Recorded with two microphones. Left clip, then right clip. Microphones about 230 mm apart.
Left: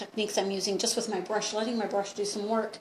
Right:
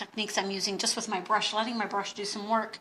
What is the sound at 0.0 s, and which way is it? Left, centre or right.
Speech, centre.